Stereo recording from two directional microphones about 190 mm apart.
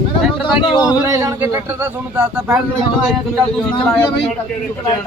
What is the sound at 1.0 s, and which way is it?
A man's voice, 15° right (ahead or behind).